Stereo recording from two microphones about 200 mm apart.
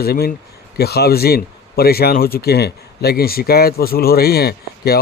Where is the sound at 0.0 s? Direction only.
50° left (ahead or behind).